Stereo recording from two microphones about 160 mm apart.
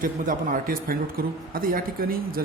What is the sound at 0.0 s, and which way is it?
A man's voice, 55° right (ahead or behind).